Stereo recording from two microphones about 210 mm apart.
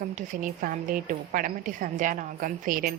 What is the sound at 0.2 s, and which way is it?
Speech, 40° right (ahead or behind).